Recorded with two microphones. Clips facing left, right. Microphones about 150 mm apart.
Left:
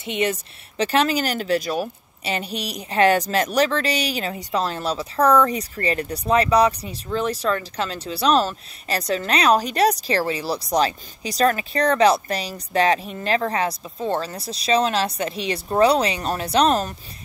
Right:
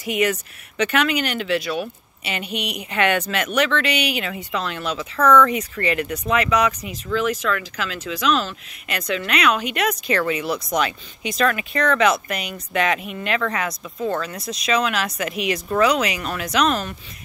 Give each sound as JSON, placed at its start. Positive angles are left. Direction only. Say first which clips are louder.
{"t": 0.0, "sound": "speech", "louder": "right 2 dB", "side_deg": 30}